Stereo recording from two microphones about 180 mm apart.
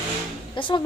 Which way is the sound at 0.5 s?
25° left (ahead or behind).